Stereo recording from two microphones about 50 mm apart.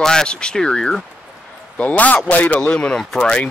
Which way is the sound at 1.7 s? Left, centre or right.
Left.